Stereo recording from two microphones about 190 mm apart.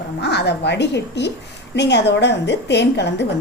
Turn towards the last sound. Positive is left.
turn(degrees=65)  # may be behind; listen again after turning